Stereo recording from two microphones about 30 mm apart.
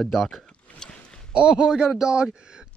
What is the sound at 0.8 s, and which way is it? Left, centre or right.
Rowboat, left.